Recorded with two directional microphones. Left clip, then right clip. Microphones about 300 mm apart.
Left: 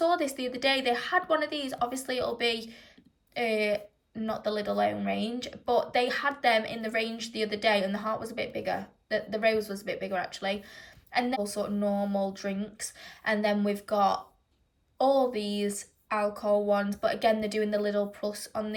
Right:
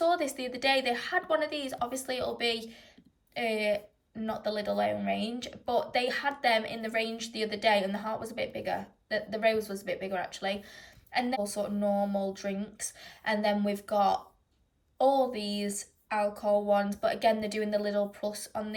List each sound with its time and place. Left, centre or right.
0.0 s speech: centre